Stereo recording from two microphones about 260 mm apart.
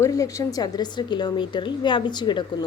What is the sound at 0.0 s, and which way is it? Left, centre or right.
A woman's voice, centre.